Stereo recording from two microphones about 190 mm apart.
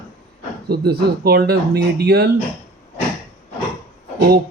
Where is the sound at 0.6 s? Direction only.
55° right (ahead or behind).